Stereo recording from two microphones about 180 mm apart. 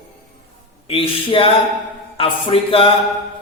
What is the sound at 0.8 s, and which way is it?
A man's voice, 30° left (ahead or behind).